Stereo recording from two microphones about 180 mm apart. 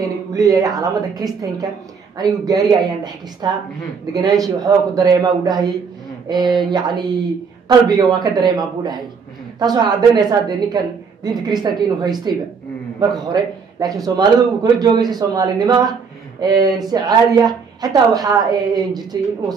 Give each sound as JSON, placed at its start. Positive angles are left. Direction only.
{"t": 0.0, "sound": "a woman's voice", "side_deg": -20}